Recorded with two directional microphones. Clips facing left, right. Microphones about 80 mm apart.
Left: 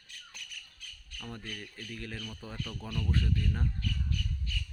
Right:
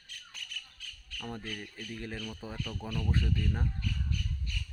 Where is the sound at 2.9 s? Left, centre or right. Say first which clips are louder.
Even; centre.